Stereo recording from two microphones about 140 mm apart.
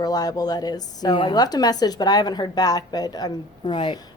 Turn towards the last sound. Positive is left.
turn(degrees=35)  # may be behind; listen again after turning